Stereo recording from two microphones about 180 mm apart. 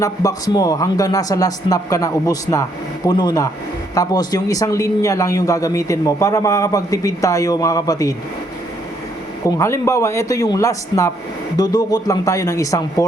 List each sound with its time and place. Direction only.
0.0 s speech: 20° left (ahead or behind)
9.6 s a man's voice: 15° left (ahead or behind)